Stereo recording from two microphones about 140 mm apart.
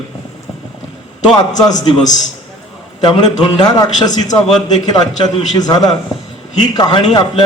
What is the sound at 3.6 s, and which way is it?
A man's voice, 25° left (ahead or behind).